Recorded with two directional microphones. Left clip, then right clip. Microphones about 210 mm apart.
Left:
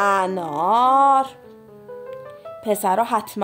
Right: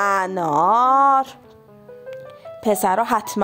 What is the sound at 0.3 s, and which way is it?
Speech, 25° right (ahead or behind).